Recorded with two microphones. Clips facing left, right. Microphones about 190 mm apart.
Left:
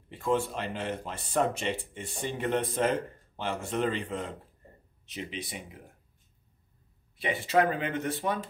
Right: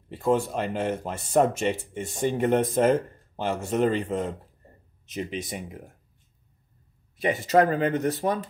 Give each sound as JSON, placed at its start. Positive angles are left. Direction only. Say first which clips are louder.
{"t": 0.1, "sound": "speech", "louder": "right 5 dB", "side_deg": -40}
{"t": 7.2, "sound": "speech", "louder": "right 5 dB", "side_deg": -40}